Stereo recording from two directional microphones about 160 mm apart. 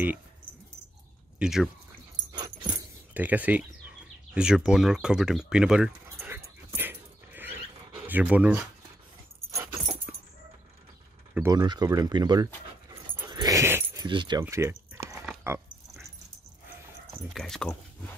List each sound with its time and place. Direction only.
1.4 s speech: 5° right (ahead or behind)
2.3 s dog: 25° right (ahead or behind)
3.2 s speech: 10° right (ahead or behind)
6.1 s dog: 15° right (ahead or behind)
8.1 s speech: 10° right (ahead or behind)
9.5 s dog: 20° right (ahead or behind)
10.1 s a sound: 10° right (ahead or behind)
11.4 s speech: 25° right (ahead or behind)
13.3 s dog: 25° right (ahead or behind)
14.0 s speech: 30° right (ahead or behind)
14.4 s a sound: 15° right (ahead or behind)
15.5 s speech: 15° right (ahead or behind)
17.3 s speech: centre (ahead or behind)